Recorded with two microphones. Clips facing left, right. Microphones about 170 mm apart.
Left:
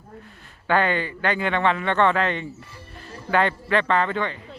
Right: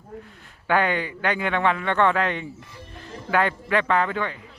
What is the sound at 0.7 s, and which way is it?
Speech, 10° right (ahead or behind).